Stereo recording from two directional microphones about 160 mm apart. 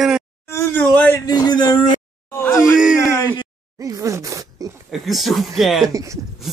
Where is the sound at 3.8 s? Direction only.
20° right (ahead or behind).